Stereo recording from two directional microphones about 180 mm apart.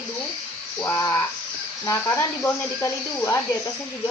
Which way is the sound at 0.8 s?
20° left (ahead or behind).